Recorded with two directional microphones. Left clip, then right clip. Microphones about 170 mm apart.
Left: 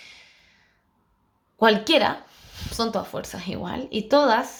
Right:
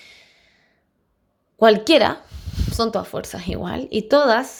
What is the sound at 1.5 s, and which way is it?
Speech, 35° right (ahead or behind).